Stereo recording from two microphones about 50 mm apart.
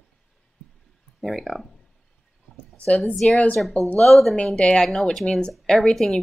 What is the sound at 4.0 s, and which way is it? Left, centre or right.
Speech, centre.